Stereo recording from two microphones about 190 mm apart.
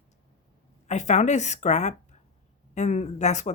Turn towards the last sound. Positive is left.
turn(degrees=35)  # may be behind; listen again after turning